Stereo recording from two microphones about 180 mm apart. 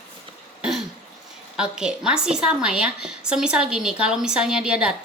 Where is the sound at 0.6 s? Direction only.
Centre (ahead or behind).